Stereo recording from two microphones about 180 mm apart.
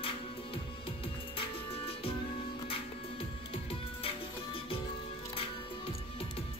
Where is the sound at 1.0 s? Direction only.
30° left (ahead or behind).